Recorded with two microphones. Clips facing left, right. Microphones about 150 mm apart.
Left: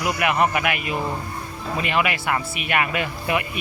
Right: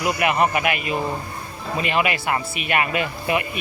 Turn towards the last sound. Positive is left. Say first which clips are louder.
# right 1 dB
turn(degrees=-25)  # may be behind; listen again after turning